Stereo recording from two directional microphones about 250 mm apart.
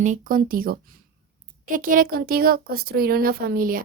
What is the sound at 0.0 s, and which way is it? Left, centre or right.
A woman's voice, right.